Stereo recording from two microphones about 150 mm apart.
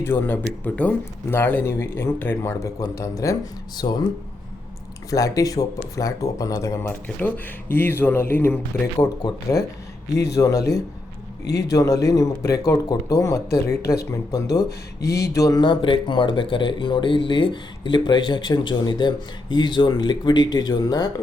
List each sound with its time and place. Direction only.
0.0 s speech: 15° left (ahead or behind)
5.1 s speech: 25° left (ahead or behind)
15.0 s speech: 90° left
15.4 s speech: 25° left (ahead or behind)